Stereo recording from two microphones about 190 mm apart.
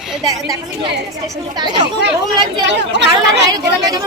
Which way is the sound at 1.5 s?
20° right (ahead or behind).